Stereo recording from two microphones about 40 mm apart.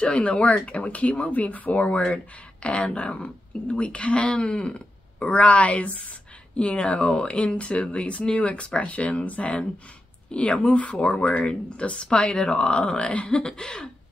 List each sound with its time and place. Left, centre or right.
0.0 s a woman's voice: left
13.1 s speech: left
13.4 s cough: centre